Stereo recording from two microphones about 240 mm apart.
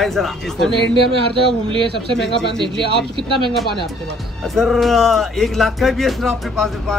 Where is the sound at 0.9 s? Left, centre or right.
Right.